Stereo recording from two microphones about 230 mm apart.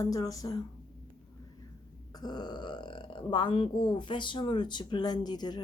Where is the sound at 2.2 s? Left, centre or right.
Centre.